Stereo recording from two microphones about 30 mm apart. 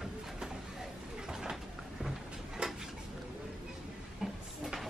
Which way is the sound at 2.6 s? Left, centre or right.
Right.